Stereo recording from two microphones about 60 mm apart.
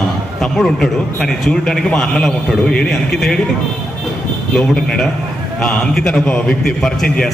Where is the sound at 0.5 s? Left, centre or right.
Centre.